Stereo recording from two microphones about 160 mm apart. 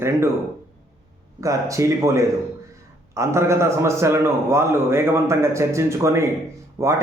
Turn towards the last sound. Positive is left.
turn(degrees=-20)  # may be behind; listen again after turning